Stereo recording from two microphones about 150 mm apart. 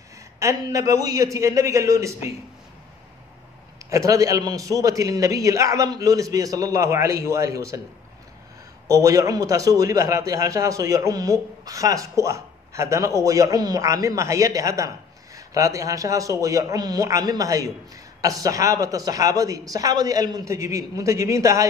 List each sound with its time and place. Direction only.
0.4 s a man's voice: 20° right (ahead or behind)
3.9 s a man's voice: 20° right (ahead or behind)
8.8 s a man's voice: 20° right (ahead or behind)